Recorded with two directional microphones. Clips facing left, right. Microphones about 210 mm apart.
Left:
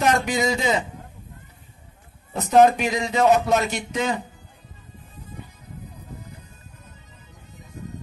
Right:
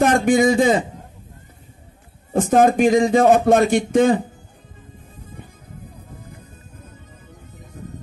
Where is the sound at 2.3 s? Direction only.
50° right (ahead or behind).